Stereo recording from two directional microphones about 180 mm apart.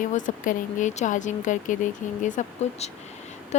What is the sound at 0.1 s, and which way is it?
Speech, 45° left (ahead or behind).